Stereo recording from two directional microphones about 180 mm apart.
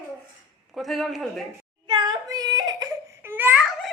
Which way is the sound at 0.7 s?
Centre (ahead or behind).